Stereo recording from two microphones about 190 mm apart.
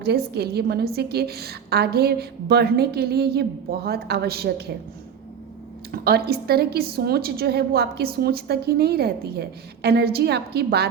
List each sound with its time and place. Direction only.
0.0 s a woman's voice: 55° right (ahead or behind)
5.9 s a woman's voice: 55° right (ahead or behind)